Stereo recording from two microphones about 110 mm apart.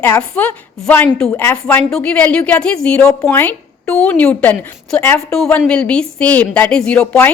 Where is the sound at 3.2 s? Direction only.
20° left (ahead or behind).